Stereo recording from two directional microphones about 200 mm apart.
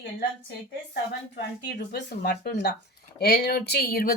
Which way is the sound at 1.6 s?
55° left (ahead or behind).